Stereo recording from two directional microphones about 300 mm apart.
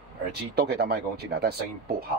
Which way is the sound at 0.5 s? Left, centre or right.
Right.